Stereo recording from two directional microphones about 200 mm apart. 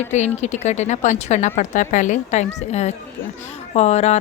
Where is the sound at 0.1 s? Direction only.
35° left (ahead or behind).